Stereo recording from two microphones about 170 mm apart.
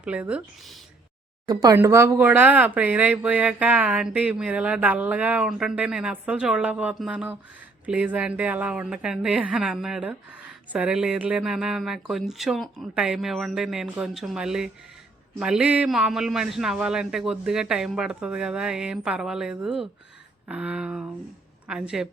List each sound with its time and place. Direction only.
0.0 s a woman's voice: 5° right (ahead or behind)